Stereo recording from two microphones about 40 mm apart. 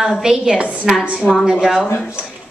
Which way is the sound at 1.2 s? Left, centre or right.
Left.